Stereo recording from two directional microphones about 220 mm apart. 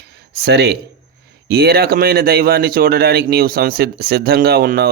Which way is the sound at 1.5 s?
45° right (ahead or behind).